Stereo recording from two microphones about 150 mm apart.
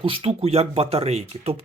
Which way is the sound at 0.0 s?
40° right (ahead or behind).